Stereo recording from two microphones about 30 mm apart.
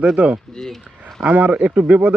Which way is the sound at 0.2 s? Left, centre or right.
Right.